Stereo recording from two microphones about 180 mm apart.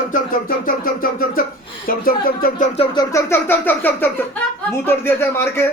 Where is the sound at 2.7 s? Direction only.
30° left (ahead or behind).